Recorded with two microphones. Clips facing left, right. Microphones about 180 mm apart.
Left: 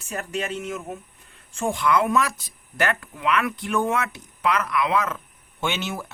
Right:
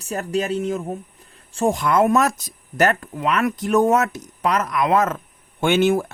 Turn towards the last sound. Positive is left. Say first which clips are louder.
# right 11 dB
turn(degrees=-50)  # may be behind; listen again after turning